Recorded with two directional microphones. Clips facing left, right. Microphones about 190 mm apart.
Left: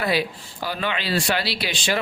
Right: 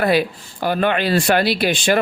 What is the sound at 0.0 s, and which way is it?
Speech, 55° right (ahead or behind).